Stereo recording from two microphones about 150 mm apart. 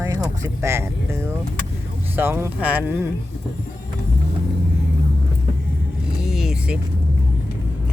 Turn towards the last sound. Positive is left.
turn(degrees=-5)  # may be behind; listen again after turning